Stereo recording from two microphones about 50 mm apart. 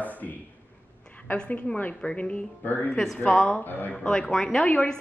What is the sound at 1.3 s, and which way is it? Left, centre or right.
A woman's voice, left.